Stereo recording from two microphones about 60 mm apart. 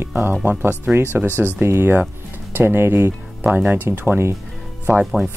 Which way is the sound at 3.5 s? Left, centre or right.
Right.